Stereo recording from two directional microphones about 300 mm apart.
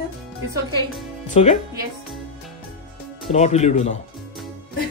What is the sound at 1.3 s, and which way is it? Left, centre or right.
Speech, left.